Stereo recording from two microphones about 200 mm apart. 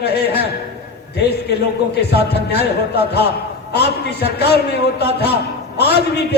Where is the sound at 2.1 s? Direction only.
55° left (ahead or behind).